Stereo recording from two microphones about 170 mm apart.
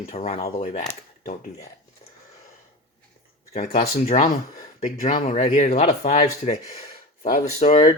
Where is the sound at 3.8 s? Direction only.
40° left (ahead or behind).